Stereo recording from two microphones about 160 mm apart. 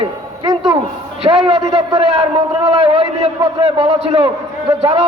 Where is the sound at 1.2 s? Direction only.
40° right (ahead or behind).